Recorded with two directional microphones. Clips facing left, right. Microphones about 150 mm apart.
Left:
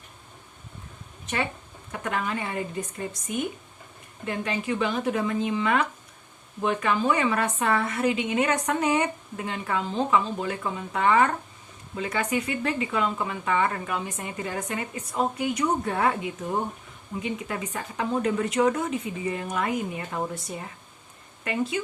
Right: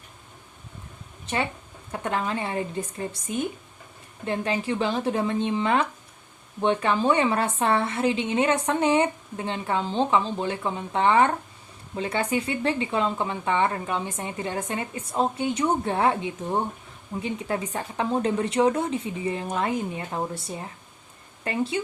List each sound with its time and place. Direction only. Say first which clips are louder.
1.9 s a woman's voice: right 2 dB; 30° right (ahead or behind)
21.4 s a woman's voice: right 1 dB; 30° right (ahead or behind)